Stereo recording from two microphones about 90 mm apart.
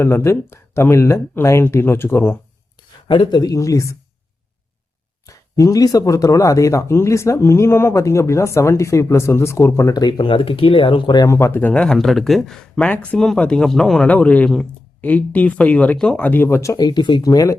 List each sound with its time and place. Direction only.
0.0 s speech: 30° left (ahead or behind)
3.1 s speech: 55° left (ahead or behind)
3.5 s speech: 35° left (ahead or behind)
5.2 s speech: 40° left (ahead or behind); by 11.3 s 60° left (ahead or behind)
11.3 s speech: 30° left (ahead or behind)
11.6 s speech: 10° left (ahead or behind)
16.5 s speech: 35° left (ahead or behind)
16.8 s speech: 55° left (ahead or behind)
17.2 s speech: 40° left (ahead or behind)